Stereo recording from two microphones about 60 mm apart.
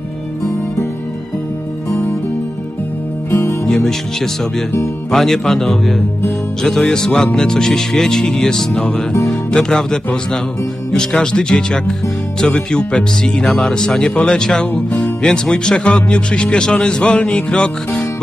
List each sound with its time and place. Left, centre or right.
3.3 s music: left
3.6 s speech: centre
14.7 s music: left
15.2 s speech: centre